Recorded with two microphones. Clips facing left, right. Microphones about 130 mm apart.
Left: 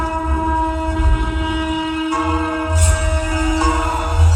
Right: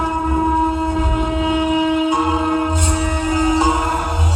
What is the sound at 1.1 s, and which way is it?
Music, 20° right (ahead or behind).